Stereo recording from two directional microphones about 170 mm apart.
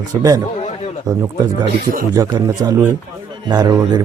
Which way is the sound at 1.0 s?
20° right (ahead or behind).